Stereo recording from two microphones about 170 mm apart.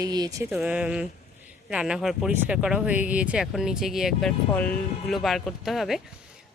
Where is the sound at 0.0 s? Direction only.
25° right (ahead or behind).